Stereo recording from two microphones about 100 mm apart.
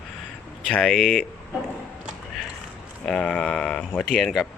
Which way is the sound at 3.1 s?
10° left (ahead or behind).